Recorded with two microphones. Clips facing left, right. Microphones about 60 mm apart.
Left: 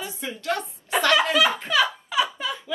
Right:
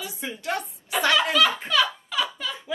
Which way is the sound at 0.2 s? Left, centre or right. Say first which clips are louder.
Left 1 dB; centre.